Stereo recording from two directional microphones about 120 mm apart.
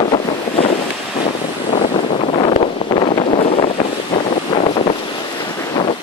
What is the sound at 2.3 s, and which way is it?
Wind noise, 50° left (ahead or behind).